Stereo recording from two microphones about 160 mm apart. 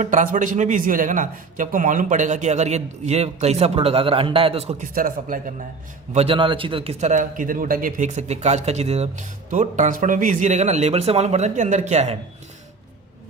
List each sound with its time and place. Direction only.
0.0 s a man's voice: 55° right (ahead or behind)
4.9 s speech: 60° right (ahead or behind)
6.1 s a man's voice: 35° right (ahead or behind)